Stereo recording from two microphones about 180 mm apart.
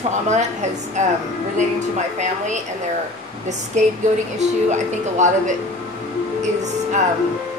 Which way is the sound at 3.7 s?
40° right (ahead or behind).